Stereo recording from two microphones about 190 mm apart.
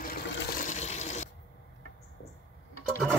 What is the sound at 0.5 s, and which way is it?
Water, 40° left (ahead or behind).